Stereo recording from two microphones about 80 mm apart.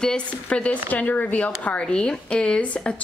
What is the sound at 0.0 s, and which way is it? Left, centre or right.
Speech, centre.